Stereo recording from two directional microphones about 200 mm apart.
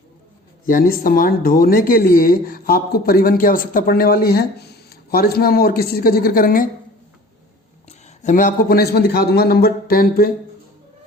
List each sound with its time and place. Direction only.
0.7 s speech: 45° left (ahead or behind)
7.9 s speech: 35° left (ahead or behind)